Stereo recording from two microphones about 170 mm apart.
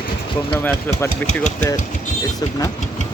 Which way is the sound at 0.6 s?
15° left (ahead or behind).